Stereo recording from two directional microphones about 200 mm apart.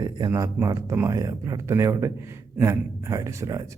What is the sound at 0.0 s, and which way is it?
Speech, 20° right (ahead or behind).